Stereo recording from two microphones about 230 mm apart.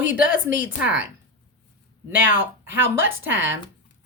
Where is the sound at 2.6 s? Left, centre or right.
Centre.